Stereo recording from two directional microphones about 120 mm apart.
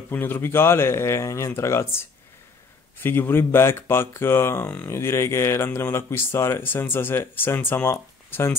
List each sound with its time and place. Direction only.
0.1 s speech: 15° left (ahead or behind)
3.0 s speech: 20° left (ahead or behind)